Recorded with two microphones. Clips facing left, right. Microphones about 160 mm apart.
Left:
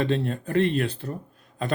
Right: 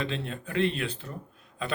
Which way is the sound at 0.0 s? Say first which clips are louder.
Left 8 dB; 45° left (ahead or behind).